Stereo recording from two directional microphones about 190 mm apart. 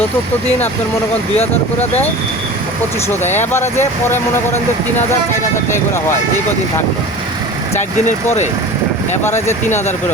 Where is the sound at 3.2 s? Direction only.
35° left (ahead or behind).